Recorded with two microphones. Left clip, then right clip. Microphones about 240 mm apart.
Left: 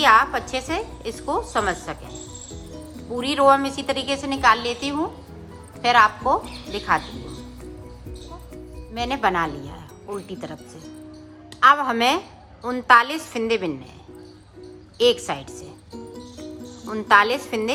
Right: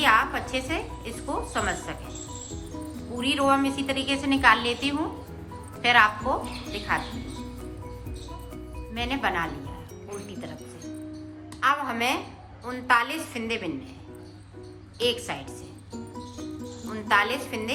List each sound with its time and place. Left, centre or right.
0.0 s a woman's voice: centre
3.2 s a woman's voice: centre
9.0 s a woman's voice: centre
11.6 s a woman's voice: left
15.0 s a woman's voice: centre
16.9 s a woman's voice: centre